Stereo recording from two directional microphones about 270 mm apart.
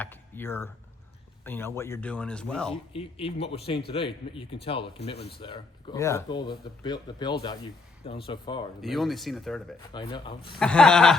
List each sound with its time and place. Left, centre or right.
0.0 s speech: centre
2.9 s a man's voice: left
8.8 s speech: centre
9.9 s speech: centre
10.6 s speech: centre